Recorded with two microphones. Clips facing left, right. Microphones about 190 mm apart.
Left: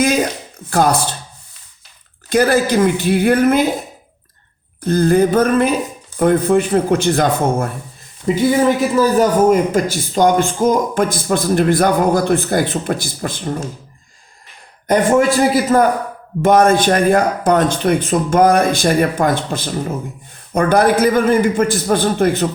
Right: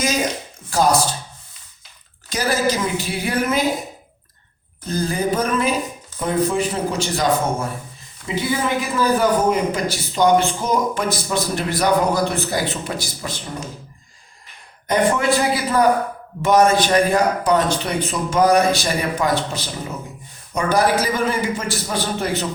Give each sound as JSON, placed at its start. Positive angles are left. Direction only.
{"t": 0.7, "sound": "speech", "side_deg": 60}
{"t": 2.3, "sound": "speech", "side_deg": 60}
{"t": 4.9, "sound": "speech", "side_deg": 60}
{"t": 8.3, "sound": "a man's voice", "side_deg": 40}
{"t": 14.8, "sound": "a man's voice", "side_deg": 45}